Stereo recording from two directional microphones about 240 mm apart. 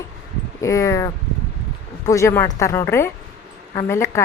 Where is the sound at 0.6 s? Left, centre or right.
Centre.